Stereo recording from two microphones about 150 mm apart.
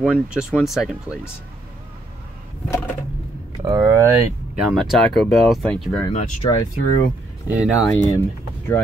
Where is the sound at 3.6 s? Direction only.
20° right (ahead or behind).